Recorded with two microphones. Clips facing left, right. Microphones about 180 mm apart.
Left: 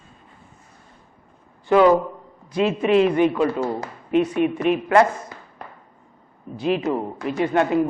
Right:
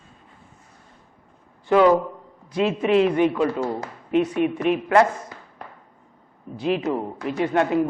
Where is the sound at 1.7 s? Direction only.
15° left (ahead or behind).